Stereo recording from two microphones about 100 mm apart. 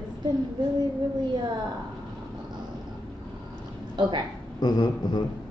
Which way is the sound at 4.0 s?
50° right (ahead or behind).